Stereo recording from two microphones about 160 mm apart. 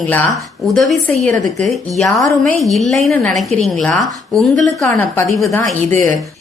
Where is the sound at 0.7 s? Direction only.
Centre (ahead or behind).